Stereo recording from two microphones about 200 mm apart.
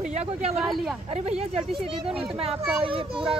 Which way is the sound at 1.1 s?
30° right (ahead or behind).